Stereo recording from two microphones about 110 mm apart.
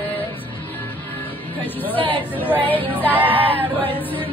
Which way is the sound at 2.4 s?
15° left (ahead or behind).